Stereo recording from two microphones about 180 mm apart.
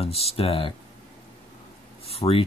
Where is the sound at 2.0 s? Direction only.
35° left (ahead or behind).